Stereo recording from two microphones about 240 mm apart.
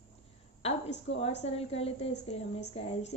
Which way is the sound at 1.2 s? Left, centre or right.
Left.